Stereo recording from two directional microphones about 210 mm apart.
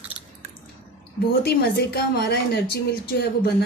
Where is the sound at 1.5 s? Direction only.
50° left (ahead or behind).